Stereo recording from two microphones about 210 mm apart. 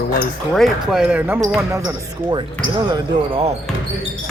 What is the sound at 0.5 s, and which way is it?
Speech, centre (ahead or behind).